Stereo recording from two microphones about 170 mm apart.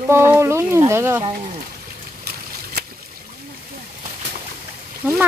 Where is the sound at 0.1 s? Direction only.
15° right (ahead or behind).